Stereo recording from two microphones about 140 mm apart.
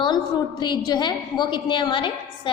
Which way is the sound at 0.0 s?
30° left (ahead or behind).